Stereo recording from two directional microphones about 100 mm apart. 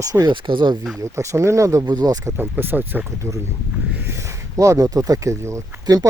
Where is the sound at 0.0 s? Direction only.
35° right (ahead or behind).